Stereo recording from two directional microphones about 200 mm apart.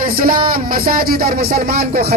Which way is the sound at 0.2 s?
45° right (ahead or behind).